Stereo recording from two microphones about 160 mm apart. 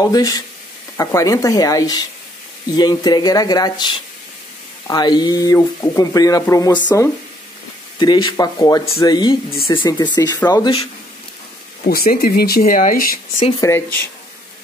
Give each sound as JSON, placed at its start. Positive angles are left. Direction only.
{"t": 0.0, "sound": "speech", "side_deg": 20}
{"t": 11.8, "sound": "speech", "side_deg": 70}
{"t": 13.6, "sound": "speech", "side_deg": 15}